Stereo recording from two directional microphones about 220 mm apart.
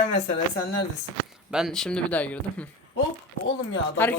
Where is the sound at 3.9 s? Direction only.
10° left (ahead or behind).